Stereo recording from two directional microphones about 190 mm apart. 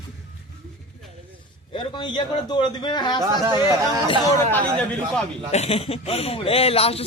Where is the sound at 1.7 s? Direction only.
25° left (ahead or behind).